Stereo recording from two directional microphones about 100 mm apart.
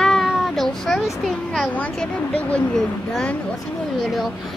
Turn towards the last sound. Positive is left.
turn(degrees=0)  # may be behind; listen again after turning